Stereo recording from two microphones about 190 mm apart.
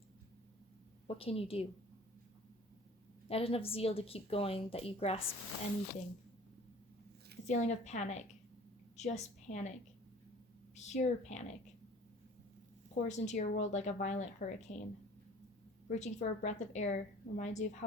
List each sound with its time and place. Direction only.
1.0 s a woman's voice: 30° left (ahead or behind)
3.2 s a woman's voice: 30° left (ahead or behind)
7.4 s a woman's voice: 35° left (ahead or behind)
10.8 s a woman's voice: 35° left (ahead or behind)
12.9 s a woman's voice: 40° left (ahead or behind)
15.9 s a woman's voice: 40° left (ahead or behind)